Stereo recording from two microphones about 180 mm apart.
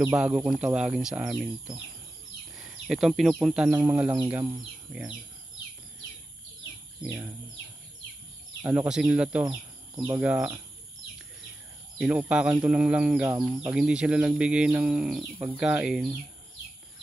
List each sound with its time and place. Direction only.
0.1 s speech: 5° right (ahead or behind)
2.5 s a sound: centre (ahead or behind)
3.4 s speech: 5° right (ahead or behind)
7.0 s speech: 10° right (ahead or behind)
8.6 s speech: 5° right (ahead or behind)
9.5 s a sound: 20° right (ahead or behind)
10.2 s speech: 10° right (ahead or behind)
12.0 s speech: 5° right (ahead or behind)